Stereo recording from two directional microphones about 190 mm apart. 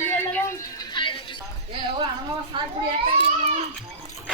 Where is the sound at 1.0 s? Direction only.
25° left (ahead or behind).